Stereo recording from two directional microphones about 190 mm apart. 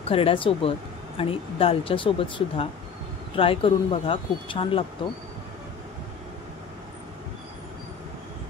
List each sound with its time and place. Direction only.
0.0 s speech: 30° left (ahead or behind)